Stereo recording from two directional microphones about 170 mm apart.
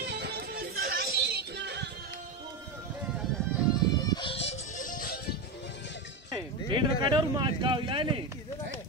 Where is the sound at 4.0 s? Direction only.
25° left (ahead or behind); by 5.4 s 60° left (ahead or behind).